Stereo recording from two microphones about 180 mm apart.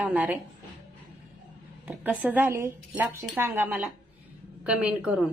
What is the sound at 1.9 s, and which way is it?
A woman's voice, 10° right (ahead or behind).